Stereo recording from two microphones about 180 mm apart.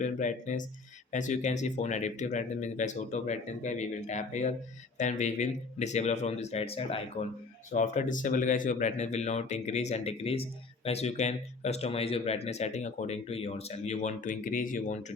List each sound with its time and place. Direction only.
0.0 s speech: 45° left (ahead or behind)